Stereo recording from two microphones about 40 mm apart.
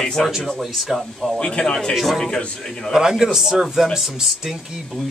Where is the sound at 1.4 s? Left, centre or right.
Centre.